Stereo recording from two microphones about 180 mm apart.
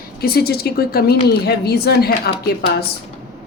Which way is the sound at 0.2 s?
60° left (ahead or behind).